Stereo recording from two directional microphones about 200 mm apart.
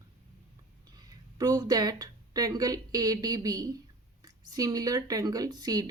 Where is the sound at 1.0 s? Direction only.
20° right (ahead or behind).